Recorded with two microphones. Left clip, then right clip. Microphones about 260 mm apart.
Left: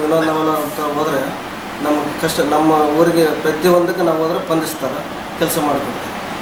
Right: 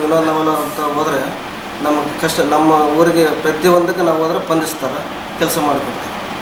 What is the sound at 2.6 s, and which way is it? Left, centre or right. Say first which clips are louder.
Speech: right 2 dB; right.